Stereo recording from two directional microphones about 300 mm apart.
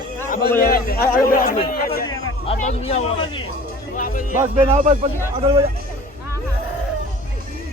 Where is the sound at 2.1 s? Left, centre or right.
Centre.